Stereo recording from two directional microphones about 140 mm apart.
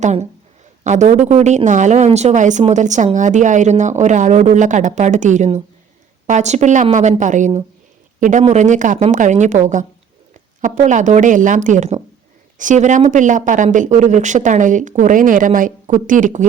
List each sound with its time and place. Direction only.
0.0 s a woman's voice: 50° right (ahead or behind)